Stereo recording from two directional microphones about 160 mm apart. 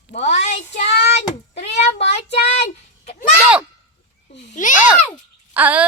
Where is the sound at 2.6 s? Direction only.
45° left (ahead or behind).